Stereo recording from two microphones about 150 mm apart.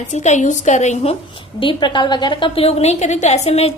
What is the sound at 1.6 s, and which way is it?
A woman's voice, 30° left (ahead or behind).